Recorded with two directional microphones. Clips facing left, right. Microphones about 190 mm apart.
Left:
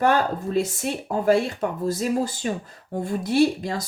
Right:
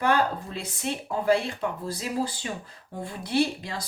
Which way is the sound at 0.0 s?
45° left (ahead or behind).